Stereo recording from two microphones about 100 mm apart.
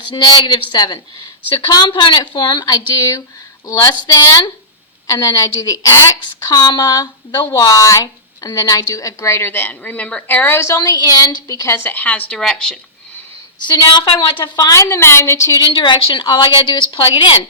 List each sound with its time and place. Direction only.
0.1 s a woman's voice: 50° left (ahead or behind)
6.4 s a woman's voice: 45° left (ahead or behind); by 10.8 s 25° left (ahead or behind)
10.8 s a woman's voice: 40° left (ahead or behind); by 12.8 s 5° left (ahead or behind)
13.7 s a woman's voice: 55° left (ahead or behind)
14.7 s a woman's voice: 30° left (ahead or behind)
15.6 s a woman's voice: 50° left (ahead or behind)